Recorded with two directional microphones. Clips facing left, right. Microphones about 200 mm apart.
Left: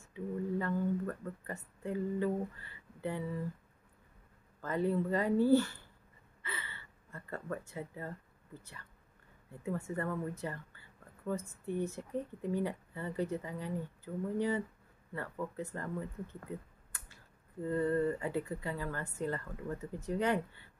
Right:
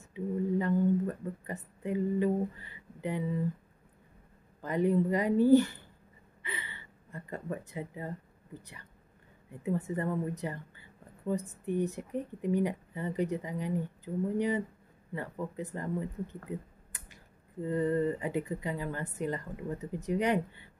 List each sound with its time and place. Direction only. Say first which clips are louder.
0.0 s a sound: right 5 dB; 20° right (ahead or behind)
4.6 s speech: right 5 dB; 15° right (ahead or behind)
6.4 s gasp: right 2 dB; 15° right (ahead or behind)
9.5 s speech: right 5 dB; 20° right (ahead or behind)